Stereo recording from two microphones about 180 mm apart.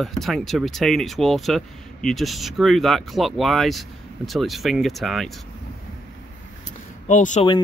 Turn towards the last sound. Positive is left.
turn(degrees=45)  # may be behind; listen again after turning